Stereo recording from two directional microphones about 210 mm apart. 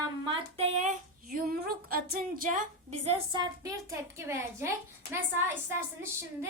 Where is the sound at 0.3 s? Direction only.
30° right (ahead or behind).